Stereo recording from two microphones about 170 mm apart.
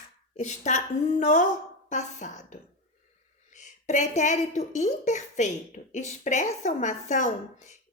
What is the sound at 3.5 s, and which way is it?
A woman's voice, 45° left (ahead or behind).